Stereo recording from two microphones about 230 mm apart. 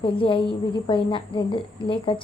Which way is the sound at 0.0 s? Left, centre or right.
Left.